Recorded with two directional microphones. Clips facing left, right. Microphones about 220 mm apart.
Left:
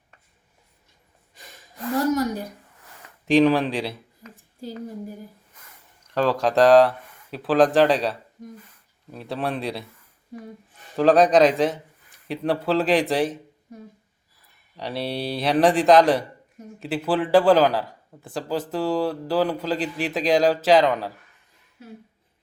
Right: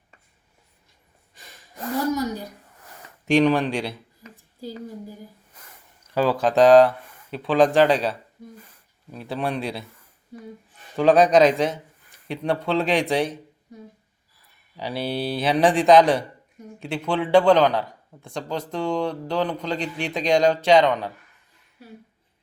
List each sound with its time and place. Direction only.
3.2 s speech: centre (ahead or behind)
6.1 s a man's voice: 5° right (ahead or behind)
9.1 s a man's voice: centre (ahead or behind)
10.9 s a man's voice: centre (ahead or behind)
14.8 s a man's voice: centre (ahead or behind)